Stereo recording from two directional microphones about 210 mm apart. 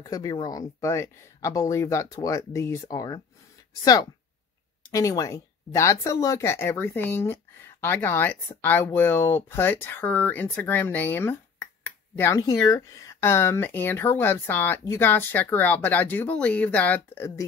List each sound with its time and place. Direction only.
0.0 s speech: 15° left (ahead or behind)